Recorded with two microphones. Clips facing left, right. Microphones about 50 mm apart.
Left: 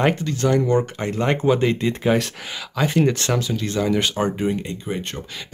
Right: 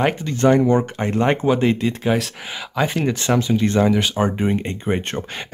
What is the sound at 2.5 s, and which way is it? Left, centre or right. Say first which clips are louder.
Speech: even; centre.